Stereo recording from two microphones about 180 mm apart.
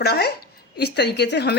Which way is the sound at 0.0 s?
65° left (ahead or behind).